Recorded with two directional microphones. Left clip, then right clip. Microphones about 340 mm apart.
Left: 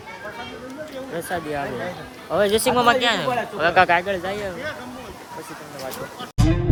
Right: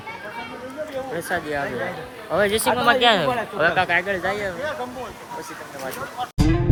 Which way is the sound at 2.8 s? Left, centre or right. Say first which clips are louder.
Right 2 dB; centre.